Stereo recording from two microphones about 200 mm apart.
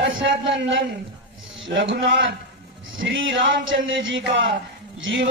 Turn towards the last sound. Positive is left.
turn(degrees=-70)  # may be behind; listen again after turning